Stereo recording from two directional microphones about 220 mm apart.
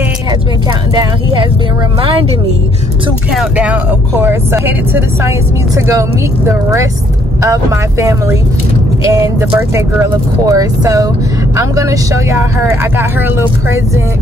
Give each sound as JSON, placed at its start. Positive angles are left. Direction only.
{"t": 0.9, "sound": "speech", "side_deg": -20}
{"t": 3.3, "sound": "speech", "side_deg": -5}